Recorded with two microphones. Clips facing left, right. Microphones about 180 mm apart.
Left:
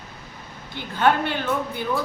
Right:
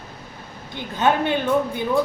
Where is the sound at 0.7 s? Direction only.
20° right (ahead or behind).